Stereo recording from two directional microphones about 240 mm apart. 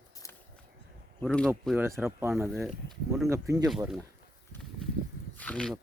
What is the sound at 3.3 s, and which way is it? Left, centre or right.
Speech, centre.